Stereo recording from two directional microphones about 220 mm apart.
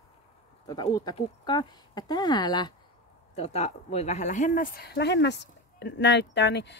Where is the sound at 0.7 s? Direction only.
20° left (ahead or behind).